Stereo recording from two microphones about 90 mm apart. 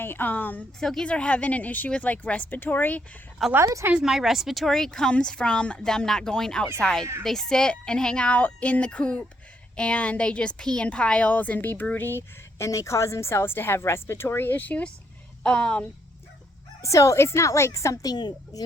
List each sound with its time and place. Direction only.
0.0 s speech: 20° left (ahead or behind)
0.8 s speech: 5° left (ahead or behind)
3.5 s a woman's voice: 35° right (ahead or behind)
3.9 s speech: 5° right (ahead or behind); by 15.9 s 10° left (ahead or behind)
16.8 s a woman's voice: 35° left (ahead or behind); by 18.6 s 50° left (ahead or behind)